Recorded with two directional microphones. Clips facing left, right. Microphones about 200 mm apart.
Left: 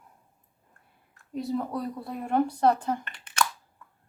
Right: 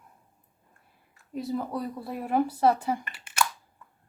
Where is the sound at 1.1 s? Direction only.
5° right (ahead or behind).